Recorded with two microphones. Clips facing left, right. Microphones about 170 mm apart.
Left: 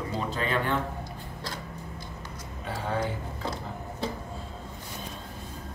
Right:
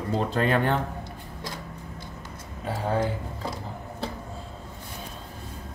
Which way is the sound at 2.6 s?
35° right (ahead or behind).